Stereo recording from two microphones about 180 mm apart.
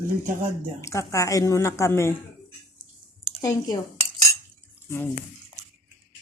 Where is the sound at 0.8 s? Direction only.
15° left (ahead or behind).